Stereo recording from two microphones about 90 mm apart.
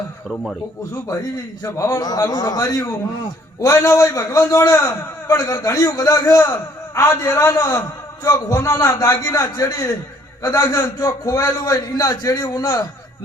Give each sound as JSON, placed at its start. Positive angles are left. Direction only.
{"t": 0.9, "sound": "a man's voice", "side_deg": 40}